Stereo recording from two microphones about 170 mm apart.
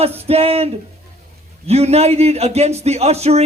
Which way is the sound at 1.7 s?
40° right (ahead or behind).